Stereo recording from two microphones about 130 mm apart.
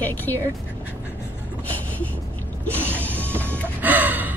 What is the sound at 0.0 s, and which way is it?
Speech, 15° left (ahead or behind).